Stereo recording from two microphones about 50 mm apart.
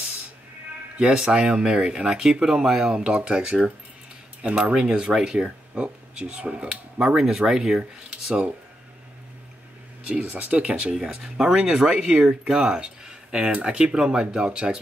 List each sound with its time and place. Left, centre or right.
0.9 s speech: centre
4.4 s speech: right
7.2 s speech: centre
10.2 s speech: right